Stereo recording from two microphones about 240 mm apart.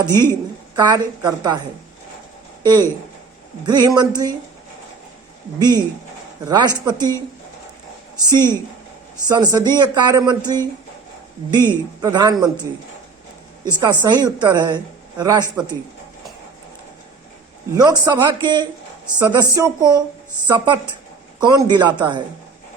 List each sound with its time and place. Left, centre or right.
0.0 s speech: centre
2.6 s speech: centre
5.5 s speech: centre
8.3 s speech: centre
11.5 s speech: centre
13.7 s speech: centre
17.7 s speech: centre